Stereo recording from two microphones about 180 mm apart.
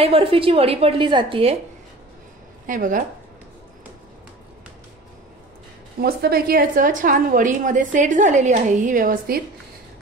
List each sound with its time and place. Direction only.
0.0 s a woman's voice: 30° right (ahead or behind)
2.6 s speech: 50° right (ahead or behind)
5.9 s a woman's voice: 60° right (ahead or behind)